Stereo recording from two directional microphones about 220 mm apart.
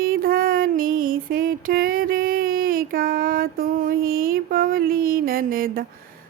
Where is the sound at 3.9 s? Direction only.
40° right (ahead or behind).